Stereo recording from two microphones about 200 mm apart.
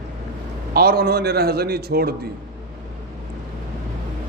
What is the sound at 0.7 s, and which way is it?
A man's voice, 50° right (ahead or behind).